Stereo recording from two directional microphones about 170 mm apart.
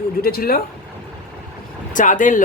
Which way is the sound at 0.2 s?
60° left (ahead or behind).